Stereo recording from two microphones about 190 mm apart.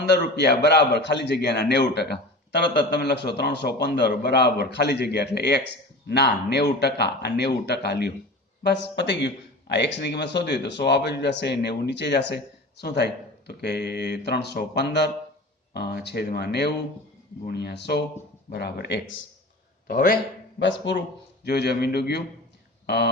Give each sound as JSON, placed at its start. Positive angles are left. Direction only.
{"t": 0.0, "sound": "speech", "side_deg": 60}
{"t": 19.9, "sound": "a man's voice", "side_deg": 50}
{"t": 20.6, "sound": "speech", "side_deg": 70}
{"t": 21.4, "sound": "speech", "side_deg": 60}